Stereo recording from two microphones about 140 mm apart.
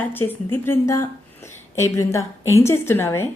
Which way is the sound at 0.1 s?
15° left (ahead or behind).